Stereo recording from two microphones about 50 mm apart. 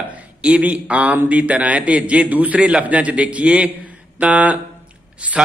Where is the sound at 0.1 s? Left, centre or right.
Right.